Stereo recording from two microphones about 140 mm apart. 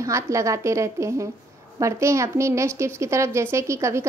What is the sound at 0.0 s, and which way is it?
A woman's voice, 20° right (ahead or behind).